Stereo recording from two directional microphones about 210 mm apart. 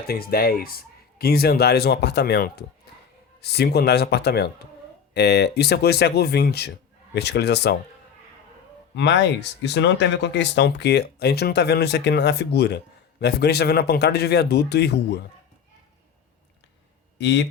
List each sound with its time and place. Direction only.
0.1 s speech: 45° left (ahead or behind)
9.0 s speech: 55° left (ahead or behind)
17.2 s speech: 55° left (ahead or behind)